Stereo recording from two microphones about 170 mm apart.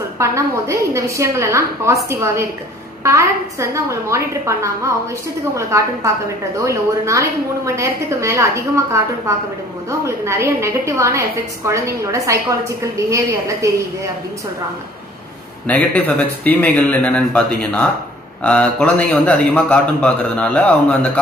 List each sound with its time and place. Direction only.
0.2 s a woman's voice: 15° right (ahead or behind)
15.6 s a man's voice: 10° left (ahead or behind)